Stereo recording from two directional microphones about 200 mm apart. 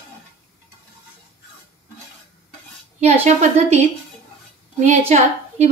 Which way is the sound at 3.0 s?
35° right (ahead or behind).